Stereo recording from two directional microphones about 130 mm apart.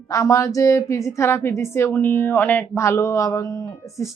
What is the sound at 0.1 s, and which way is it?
A woman's voice, 25° left (ahead or behind).